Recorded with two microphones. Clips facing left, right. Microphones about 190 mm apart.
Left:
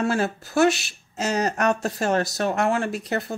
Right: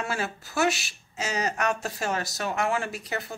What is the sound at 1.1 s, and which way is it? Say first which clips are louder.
A woman's voice: left 5 dB; 40° left (ahead or behind).